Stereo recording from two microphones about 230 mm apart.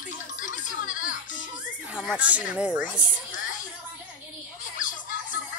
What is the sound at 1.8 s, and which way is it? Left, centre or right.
Speech, centre.